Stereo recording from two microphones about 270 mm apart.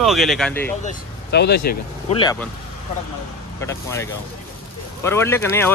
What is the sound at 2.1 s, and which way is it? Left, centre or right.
Speech, centre.